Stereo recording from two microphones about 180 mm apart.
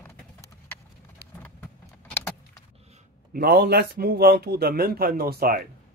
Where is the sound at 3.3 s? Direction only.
60° right (ahead or behind).